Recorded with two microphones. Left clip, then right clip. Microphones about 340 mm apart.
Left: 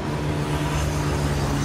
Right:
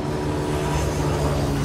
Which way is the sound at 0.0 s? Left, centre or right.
Right.